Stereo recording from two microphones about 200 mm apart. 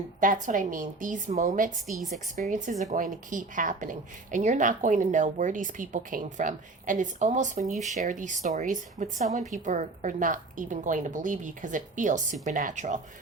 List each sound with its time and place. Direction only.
0.2 s a woman's voice: 40° right (ahead or behind)